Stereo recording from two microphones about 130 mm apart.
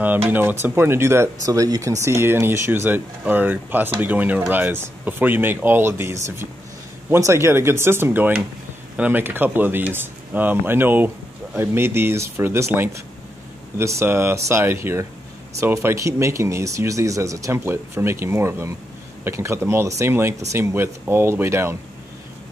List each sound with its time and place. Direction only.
0.0 s speech: 15° right (ahead or behind)